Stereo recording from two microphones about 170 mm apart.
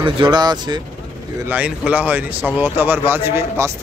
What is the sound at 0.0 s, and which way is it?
Speech, 30° right (ahead or behind).